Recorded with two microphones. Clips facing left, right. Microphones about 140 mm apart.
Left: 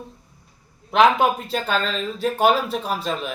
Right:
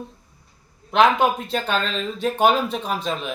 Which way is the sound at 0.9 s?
5° left (ahead or behind).